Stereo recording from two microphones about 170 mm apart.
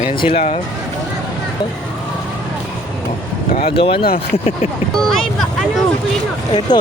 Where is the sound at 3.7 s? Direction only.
35° left (ahead or behind).